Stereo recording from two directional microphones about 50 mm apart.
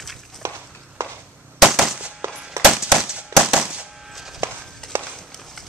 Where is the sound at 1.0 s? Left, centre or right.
Right.